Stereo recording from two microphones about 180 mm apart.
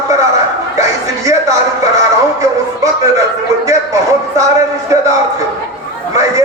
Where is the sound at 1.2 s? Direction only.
15° right (ahead or behind).